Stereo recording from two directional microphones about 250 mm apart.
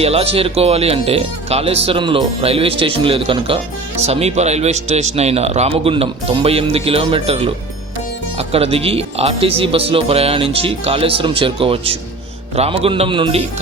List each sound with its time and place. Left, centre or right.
0.0 s speech: right